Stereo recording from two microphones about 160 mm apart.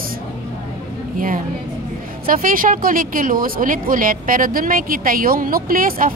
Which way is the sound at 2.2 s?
60° right (ahead or behind).